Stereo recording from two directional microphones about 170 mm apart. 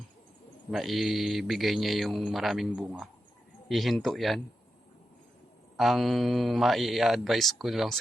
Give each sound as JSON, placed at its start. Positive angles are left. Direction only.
{"t": 0.7, "sound": "speech", "side_deg": 0}
{"t": 5.7, "sound": "speech", "side_deg": 0}